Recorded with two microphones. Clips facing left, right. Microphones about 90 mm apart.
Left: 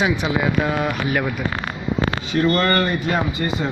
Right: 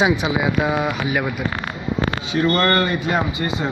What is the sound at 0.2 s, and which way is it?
Speech, 10° right (ahead or behind).